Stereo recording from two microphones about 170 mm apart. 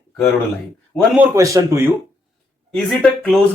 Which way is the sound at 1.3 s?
20° right (ahead or behind).